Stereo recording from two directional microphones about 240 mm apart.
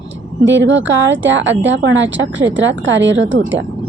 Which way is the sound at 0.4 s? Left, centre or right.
Right.